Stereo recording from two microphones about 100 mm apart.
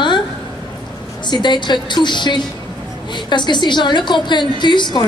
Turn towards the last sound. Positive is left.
turn(degrees=50)  # may be behind; listen again after turning